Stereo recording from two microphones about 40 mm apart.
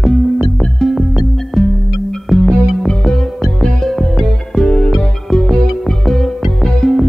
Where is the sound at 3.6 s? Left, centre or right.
Centre.